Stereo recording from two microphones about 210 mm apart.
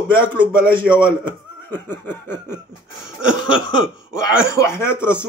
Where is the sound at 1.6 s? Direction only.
10° left (ahead or behind).